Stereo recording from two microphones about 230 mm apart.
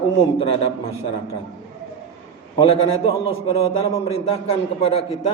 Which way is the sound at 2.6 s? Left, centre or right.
Left.